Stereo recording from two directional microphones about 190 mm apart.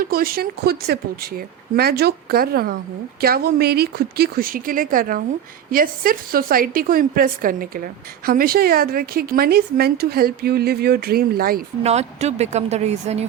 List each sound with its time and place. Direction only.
0.0 s speech: 50° right (ahead or behind)
11.8 s speech: 35° right (ahead or behind)